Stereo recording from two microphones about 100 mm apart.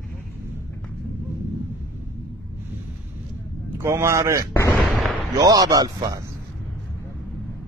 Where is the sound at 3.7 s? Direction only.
25° right (ahead or behind).